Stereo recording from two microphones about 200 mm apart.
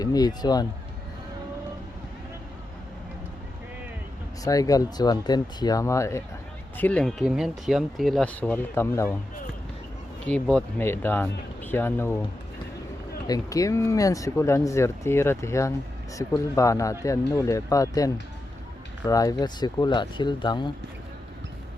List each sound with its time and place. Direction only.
0.0 s speech: 20° left (ahead or behind)
4.4 s speech: 15° left (ahead or behind)
10.2 s speech: 5° left (ahead or behind)
13.2 s speech: 20° left (ahead or behind)